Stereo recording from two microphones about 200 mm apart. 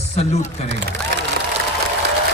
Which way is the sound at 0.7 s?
60° right (ahead or behind).